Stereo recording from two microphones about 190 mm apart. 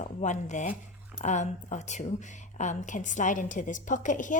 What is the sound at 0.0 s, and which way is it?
Speech, 40° left (ahead or behind).